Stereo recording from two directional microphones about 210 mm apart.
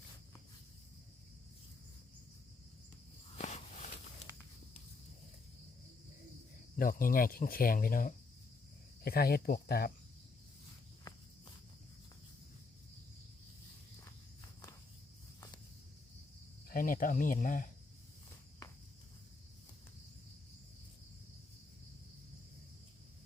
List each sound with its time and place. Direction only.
3.3 s a sound: 35° left (ahead or behind)
6.7 s speech: 40° left (ahead or behind)
11.1 s walk: 20° left (ahead or behind)
16.6 s speech: 40° left (ahead or behind)